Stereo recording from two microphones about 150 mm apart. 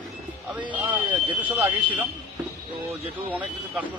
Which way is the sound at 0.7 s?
10° right (ahead or behind).